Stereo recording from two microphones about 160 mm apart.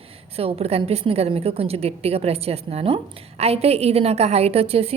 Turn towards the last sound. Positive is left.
turn(degrees=-40)  # may be behind; listen again after turning